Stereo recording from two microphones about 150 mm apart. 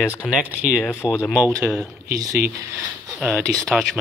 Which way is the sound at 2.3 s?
90° right.